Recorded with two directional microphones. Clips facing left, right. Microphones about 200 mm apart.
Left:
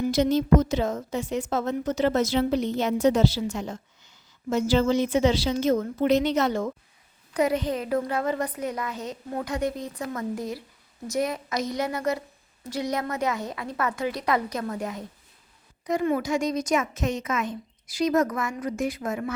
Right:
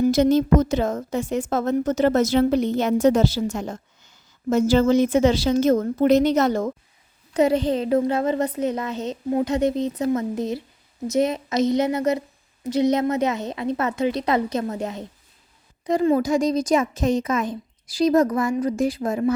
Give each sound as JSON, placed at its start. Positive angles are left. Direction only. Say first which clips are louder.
{"t": 0.0, "sound": "a woman's voice", "louder": "right 5 dB", "side_deg": -45}
{"t": 7.3, "sound": "a woman's voice", "louder": "right 5 dB", "side_deg": -30}